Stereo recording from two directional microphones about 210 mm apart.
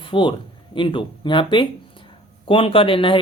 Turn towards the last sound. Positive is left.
turn(degrees=25)  # may be behind; listen again after turning